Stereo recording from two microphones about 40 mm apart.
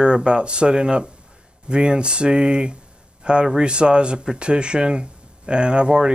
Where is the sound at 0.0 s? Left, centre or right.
Right.